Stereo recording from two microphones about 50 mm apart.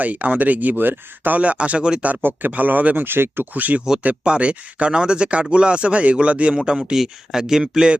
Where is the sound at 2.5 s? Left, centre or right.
Right.